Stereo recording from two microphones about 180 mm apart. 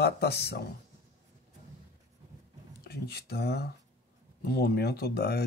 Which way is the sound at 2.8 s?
60° left (ahead or behind).